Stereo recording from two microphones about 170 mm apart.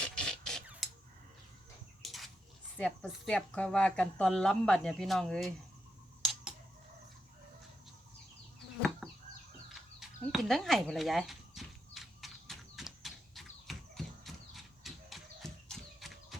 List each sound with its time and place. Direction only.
0.0 s a sound: 5° left (ahead or behind)
2.7 s speech: 5° left (ahead or behind)
9.6 s bird: centre (ahead or behind)